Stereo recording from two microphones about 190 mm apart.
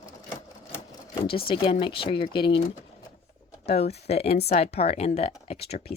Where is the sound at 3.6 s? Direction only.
35° left (ahead or behind).